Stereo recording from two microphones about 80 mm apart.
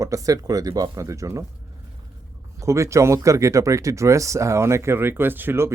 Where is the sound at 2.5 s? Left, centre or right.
Right.